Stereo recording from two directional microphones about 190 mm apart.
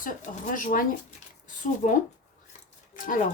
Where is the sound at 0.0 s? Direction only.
45° left (ahead or behind).